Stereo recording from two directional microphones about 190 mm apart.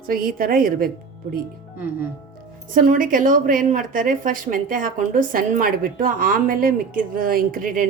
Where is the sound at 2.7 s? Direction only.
45° right (ahead or behind).